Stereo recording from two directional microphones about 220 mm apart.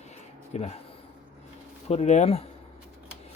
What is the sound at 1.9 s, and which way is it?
Speech, 30° left (ahead or behind).